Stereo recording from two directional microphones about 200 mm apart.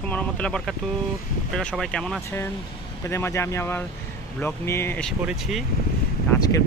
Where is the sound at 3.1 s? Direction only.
15° left (ahead or behind).